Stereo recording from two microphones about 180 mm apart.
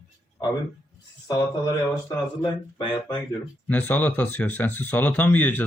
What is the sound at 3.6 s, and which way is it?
Speech, 10° left (ahead or behind).